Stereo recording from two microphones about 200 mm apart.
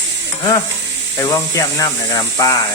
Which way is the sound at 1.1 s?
15° left (ahead or behind).